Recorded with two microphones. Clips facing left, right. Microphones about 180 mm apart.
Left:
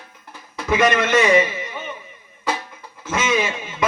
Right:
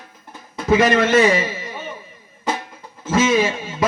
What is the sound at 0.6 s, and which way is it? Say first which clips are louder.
A man's voice: right 3 dB; 30° right (ahead or behind).